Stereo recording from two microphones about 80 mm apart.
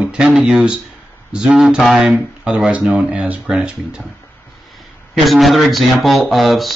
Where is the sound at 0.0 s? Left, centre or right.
Centre.